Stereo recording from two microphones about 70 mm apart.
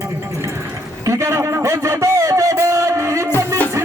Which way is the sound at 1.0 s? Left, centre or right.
Right.